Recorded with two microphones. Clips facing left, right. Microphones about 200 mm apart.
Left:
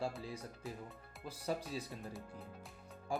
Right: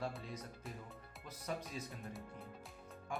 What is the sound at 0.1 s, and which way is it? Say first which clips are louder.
Speech: left 3 dB; 5° left (ahead or behind).